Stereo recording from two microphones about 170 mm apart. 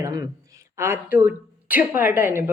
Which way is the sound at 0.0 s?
20° right (ahead or behind).